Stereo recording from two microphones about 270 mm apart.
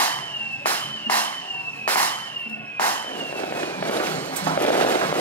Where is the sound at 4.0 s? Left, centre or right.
Centre.